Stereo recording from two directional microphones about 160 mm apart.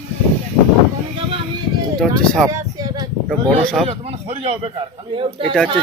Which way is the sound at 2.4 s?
20° right (ahead or behind).